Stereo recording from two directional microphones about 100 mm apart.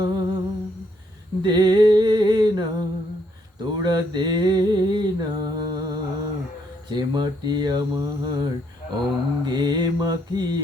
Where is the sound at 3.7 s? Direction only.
45° right (ahead or behind).